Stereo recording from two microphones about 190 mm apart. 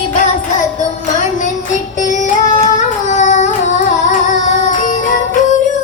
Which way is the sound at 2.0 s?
40° left (ahead or behind).